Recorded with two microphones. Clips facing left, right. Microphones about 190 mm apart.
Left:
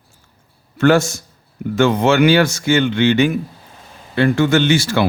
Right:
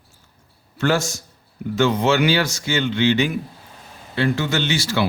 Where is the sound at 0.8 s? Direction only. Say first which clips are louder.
Left 7 dB; 55° left (ahead or behind).